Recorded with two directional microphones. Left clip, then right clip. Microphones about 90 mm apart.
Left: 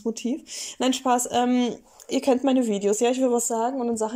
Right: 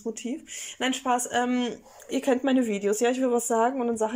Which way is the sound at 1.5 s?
20° left (ahead or behind).